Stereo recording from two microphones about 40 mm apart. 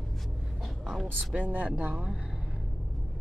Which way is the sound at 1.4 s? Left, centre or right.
Right.